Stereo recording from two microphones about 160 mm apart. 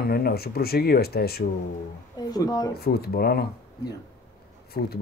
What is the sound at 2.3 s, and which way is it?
Speech, 25° left (ahead or behind).